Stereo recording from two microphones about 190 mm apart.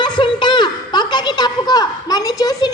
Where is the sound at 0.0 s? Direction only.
25° left (ahead or behind).